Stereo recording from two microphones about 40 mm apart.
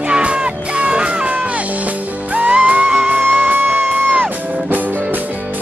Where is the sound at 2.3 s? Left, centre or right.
Right.